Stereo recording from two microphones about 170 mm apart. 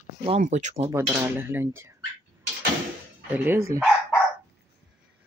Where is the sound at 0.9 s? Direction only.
15° right (ahead or behind).